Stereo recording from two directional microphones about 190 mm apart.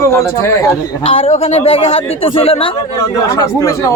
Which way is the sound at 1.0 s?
30° left (ahead or behind).